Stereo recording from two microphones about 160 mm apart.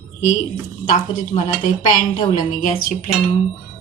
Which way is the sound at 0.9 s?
55° left (ahead or behind).